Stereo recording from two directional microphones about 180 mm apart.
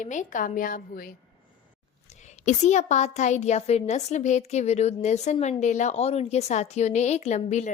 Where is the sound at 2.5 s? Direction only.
40° left (ahead or behind).